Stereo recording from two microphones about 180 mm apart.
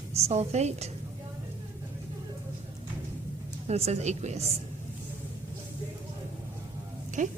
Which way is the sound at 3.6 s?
35° right (ahead or behind).